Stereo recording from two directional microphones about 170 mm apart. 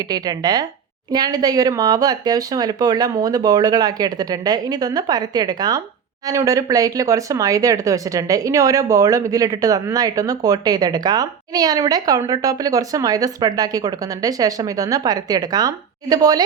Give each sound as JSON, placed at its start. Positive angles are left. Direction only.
{"t": 0.1, "sound": "speech", "side_deg": -25}